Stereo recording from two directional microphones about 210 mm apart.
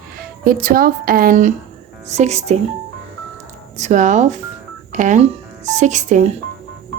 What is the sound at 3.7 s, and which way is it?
Speech, 35° right (ahead or behind).